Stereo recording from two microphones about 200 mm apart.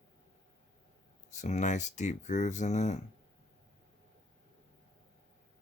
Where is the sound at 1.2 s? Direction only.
35° left (ahead or behind).